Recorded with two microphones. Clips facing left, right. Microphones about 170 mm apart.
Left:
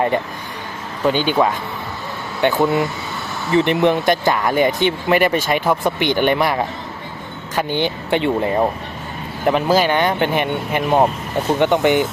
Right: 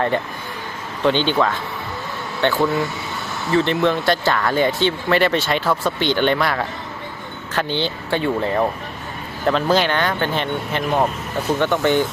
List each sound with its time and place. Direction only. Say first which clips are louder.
1.0 s speech: left 1 dB; 10° left (ahead or behind)